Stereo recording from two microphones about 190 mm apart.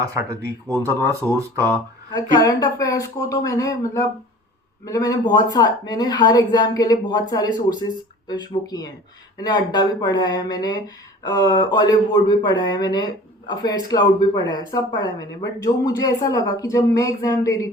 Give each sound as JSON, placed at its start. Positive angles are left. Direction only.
{"t": 0.0, "sound": "speech", "side_deg": -15}
{"t": 2.4, "sound": "speech", "side_deg": 20}